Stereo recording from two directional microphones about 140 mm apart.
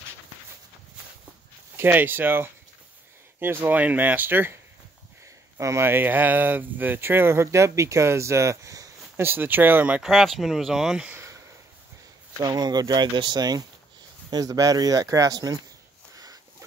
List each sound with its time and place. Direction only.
1.8 s speech: 15° right (ahead or behind)
12.4 s speech: 25° right (ahead or behind)